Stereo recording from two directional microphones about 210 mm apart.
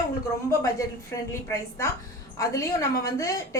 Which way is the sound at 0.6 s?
15° left (ahead or behind).